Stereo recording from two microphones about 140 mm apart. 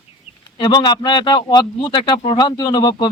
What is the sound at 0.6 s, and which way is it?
Speech, 30° left (ahead or behind).